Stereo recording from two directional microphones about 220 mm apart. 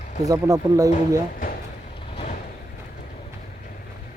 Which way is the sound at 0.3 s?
15° right (ahead or behind).